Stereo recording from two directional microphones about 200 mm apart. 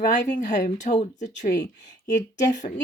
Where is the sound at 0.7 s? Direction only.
35° left (ahead or behind).